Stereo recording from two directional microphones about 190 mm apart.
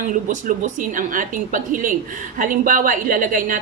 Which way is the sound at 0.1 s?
40° right (ahead or behind).